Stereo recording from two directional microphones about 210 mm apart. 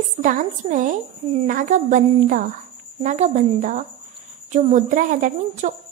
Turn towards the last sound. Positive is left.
turn(degrees=-35)  # may be behind; listen again after turning